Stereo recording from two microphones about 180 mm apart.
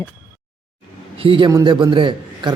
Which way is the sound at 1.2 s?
30° right (ahead or behind).